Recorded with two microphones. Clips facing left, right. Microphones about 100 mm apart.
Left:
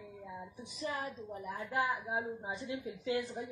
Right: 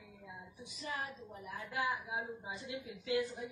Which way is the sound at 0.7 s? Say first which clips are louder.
Left 3 dB; 30° left (ahead or behind).